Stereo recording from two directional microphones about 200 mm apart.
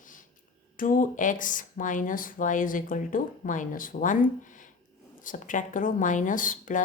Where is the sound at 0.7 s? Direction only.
40° left (ahead or behind).